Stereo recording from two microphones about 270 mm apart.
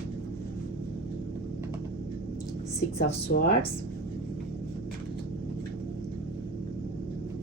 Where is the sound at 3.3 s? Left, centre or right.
Left.